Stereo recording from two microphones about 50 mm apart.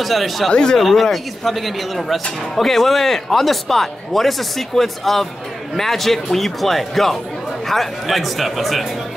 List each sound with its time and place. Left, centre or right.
0.0 s a man's voice: centre
0.5 s speech: centre
0.7 s a man's voice: centre